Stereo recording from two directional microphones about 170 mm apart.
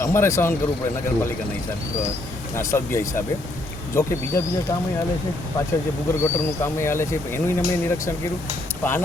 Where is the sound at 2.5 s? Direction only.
15° left (ahead or behind).